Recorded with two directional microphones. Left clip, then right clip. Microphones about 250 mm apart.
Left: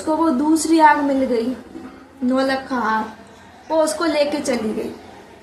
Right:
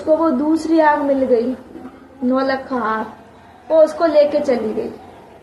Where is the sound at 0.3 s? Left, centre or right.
Centre.